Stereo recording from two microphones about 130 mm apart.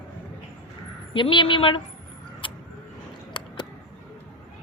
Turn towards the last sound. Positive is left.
turn(degrees=35)  # may be behind; listen again after turning